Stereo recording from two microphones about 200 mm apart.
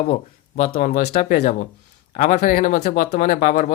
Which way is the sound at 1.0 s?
45° left (ahead or behind).